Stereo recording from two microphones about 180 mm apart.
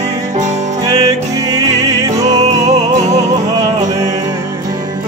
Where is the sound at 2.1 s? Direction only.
20° right (ahead or behind).